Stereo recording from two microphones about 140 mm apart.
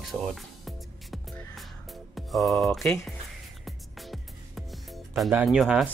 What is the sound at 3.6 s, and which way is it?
Music, centre (ahead or behind).